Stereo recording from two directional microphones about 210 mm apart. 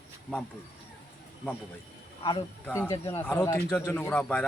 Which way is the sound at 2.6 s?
10° left (ahead or behind).